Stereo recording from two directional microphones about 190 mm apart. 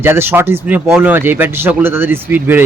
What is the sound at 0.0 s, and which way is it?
Speech, 10° right (ahead or behind).